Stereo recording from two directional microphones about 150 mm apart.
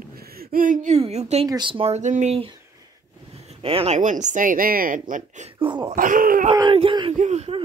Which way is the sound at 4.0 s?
55° right (ahead or behind).